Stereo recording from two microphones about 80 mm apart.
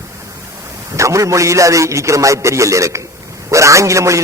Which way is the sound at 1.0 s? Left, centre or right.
Right.